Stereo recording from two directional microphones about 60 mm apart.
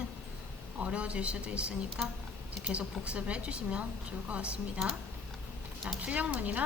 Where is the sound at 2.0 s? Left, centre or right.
Centre.